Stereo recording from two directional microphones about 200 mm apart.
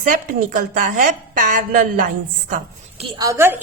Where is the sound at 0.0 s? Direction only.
45° right (ahead or behind).